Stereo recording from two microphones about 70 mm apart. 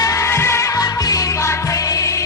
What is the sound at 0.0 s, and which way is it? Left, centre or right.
Music, left.